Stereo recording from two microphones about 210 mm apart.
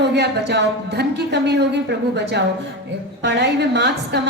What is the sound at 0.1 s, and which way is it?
A woman's voice, 55° right (ahead or behind).